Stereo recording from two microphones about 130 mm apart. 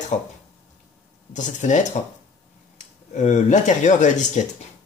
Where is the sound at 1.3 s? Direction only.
70° left (ahead or behind).